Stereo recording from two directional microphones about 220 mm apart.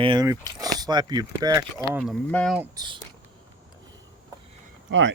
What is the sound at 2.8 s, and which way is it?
Speech, 15° right (ahead or behind).